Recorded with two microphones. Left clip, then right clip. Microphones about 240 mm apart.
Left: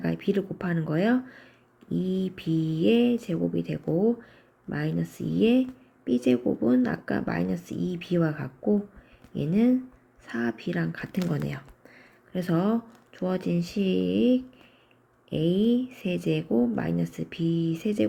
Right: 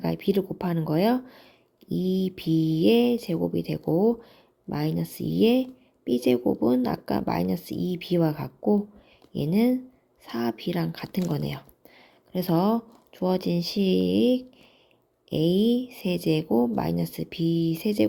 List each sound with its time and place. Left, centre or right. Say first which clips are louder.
0.0 s speech: right 2 dB; right